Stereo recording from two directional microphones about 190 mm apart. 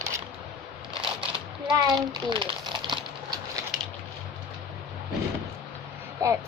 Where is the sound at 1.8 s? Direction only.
25° right (ahead or behind).